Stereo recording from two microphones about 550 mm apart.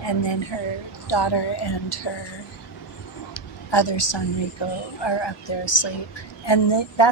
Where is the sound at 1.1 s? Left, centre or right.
Left.